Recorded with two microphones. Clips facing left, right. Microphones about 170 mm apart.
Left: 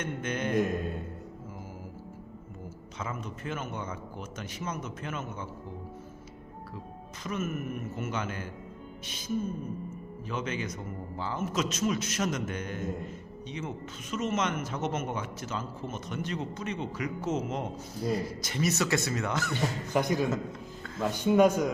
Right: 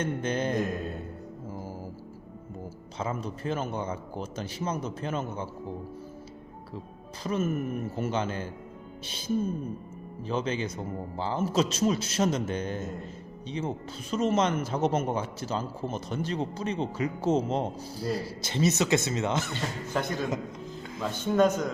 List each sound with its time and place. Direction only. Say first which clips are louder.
0.0 s speech: right 4 dB; 30° right (ahead or behind)
3.0 s speech: right 5 dB; 30° right (ahead or behind)
7.3 s speech: right 5 dB; 30° right (ahead or behind)
9.0 s music: right 3 dB; 30° right (ahead or behind)
10.2 s speech: right 4 dB; 30° right (ahead or behind)
19.5 s speech: left 2 dB; 15° left (ahead or behind)